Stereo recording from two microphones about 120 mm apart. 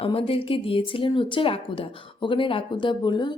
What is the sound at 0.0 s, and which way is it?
Speech, 50° left (ahead or behind).